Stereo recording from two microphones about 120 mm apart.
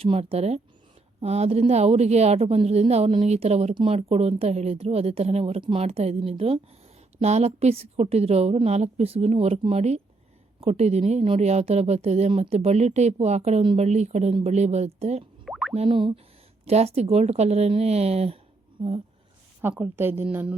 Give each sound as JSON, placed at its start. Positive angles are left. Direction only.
{"t": 0.0, "sound": "speech", "side_deg": -55}
{"t": 15.4, "sound": "boing", "side_deg": 0}
{"t": 15.7, "sound": "speech", "side_deg": -60}
{"t": 16.0, "sound": "speech", "side_deg": -40}
{"t": 16.6, "sound": "speech", "side_deg": -60}
{"t": 19.7, "sound": "a woman's voice", "side_deg": -15}